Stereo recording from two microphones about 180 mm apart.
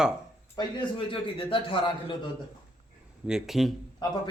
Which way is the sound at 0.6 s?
25° left (ahead or behind).